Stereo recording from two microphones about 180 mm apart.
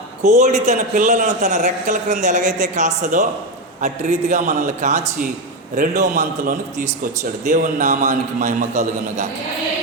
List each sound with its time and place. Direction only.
0.2 s a man's voice: 40° right (ahead or behind)